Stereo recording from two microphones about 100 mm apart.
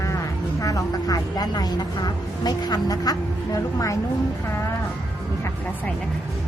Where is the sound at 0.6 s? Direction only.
35° left (ahead or behind).